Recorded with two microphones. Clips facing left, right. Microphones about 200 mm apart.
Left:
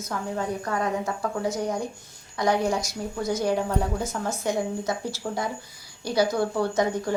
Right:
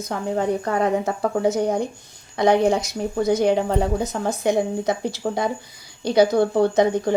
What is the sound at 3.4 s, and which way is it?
Speech, 25° right (ahead or behind).